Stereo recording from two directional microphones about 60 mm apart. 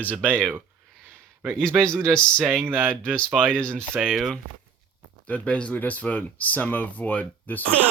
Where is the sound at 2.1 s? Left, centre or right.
Centre.